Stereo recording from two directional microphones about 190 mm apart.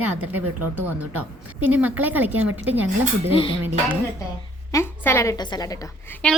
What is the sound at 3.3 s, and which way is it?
Speech, 30° left (ahead or behind).